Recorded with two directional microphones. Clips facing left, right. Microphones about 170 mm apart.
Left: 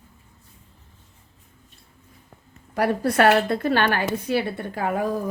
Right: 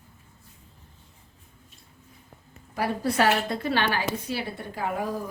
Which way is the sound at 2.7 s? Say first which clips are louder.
Left 5 dB; 65° left (ahead or behind).